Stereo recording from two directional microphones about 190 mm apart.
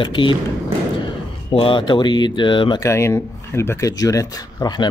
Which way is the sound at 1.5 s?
25° left (ahead or behind).